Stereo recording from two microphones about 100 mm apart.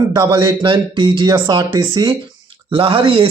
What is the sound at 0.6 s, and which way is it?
Speech, 55° right (ahead or behind).